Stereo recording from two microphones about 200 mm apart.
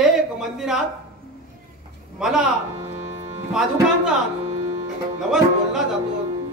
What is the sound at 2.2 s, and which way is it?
Speech, 5° right (ahead or behind).